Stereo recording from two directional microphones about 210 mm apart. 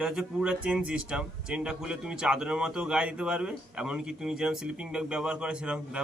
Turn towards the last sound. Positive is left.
turn(degrees=-5)  # may be behind; listen again after turning